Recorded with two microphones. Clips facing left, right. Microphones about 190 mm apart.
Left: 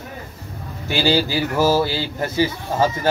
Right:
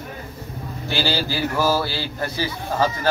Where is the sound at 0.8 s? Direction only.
15° left (ahead or behind).